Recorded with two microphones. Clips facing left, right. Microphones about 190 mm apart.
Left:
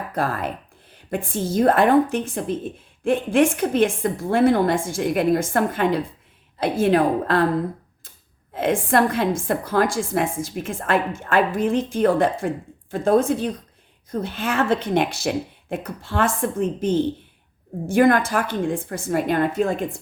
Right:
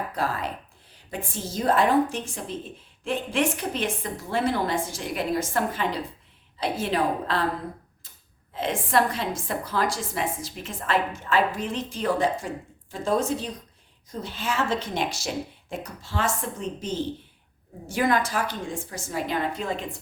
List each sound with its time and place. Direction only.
0.1 s a woman's voice: 55° left (ahead or behind)
8.5 s a woman's voice: 50° left (ahead or behind)